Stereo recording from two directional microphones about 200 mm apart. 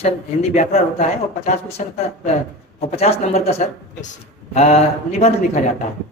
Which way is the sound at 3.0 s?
30° left (ahead or behind).